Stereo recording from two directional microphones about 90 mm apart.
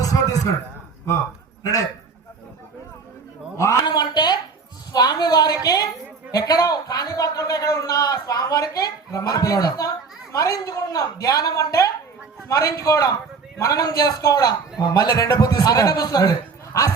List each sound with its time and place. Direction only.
0.0 s a sound: 40° left (ahead or behind)
1.6 s a woman's voice: 40° left (ahead or behind)
3.8 s a man's voice: 55° left (ahead or behind); by 16.9 s 35° left (ahead or behind)